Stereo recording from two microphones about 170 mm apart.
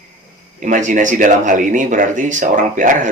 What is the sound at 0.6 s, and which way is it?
Speech, 50° right (ahead or behind).